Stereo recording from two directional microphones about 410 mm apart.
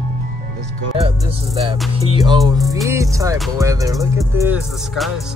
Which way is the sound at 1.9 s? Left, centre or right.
Centre.